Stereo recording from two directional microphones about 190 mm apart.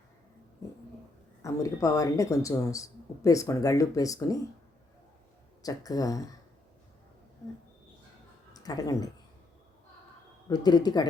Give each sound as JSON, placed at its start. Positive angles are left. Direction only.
{"t": 1.4, "sound": "speech", "side_deg": 15}
{"t": 5.6, "sound": "speech", "side_deg": 20}
{"t": 8.5, "sound": "speech", "side_deg": 20}
{"t": 10.5, "sound": "speech", "side_deg": 20}